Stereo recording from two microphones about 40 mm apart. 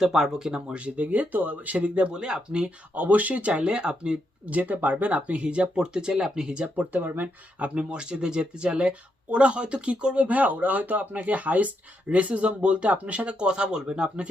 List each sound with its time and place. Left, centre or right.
0.0 s speech: centre
0.7 s speech: right
2.0 s speech: right
3.5 s speech: right
4.4 s speech: right
5.7 s speech: centre
6.7 s speech: right
7.6 s speech: right